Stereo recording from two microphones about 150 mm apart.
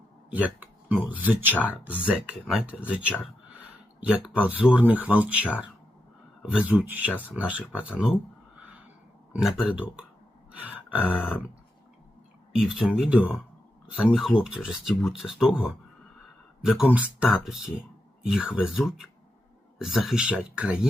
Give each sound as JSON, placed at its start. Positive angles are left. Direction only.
{"t": 0.3, "sound": "speech", "side_deg": -10}
{"t": 4.0, "sound": "speech", "side_deg": -5}
{"t": 9.3, "sound": "speech", "side_deg": 0}
{"t": 10.5, "sound": "grunt", "side_deg": -10}
{"t": 11.1, "sound": "speech", "side_deg": -5}
{"t": 12.5, "sound": "speech", "side_deg": -5}